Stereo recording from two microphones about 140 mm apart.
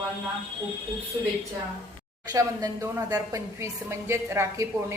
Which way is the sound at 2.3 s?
25° right (ahead or behind).